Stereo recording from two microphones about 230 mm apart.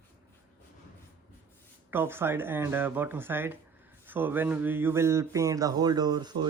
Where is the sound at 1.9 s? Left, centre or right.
Centre.